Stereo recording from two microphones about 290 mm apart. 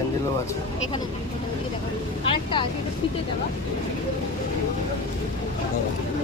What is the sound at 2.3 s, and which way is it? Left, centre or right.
Vehicle, centre.